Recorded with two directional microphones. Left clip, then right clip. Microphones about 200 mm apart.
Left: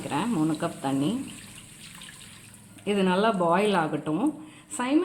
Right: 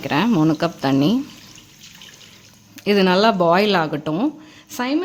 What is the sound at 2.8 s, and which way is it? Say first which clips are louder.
A woman's voice: right 9 dB; 60° right (ahead or behind).